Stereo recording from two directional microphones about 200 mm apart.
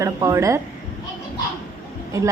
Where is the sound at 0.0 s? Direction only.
15° right (ahead or behind).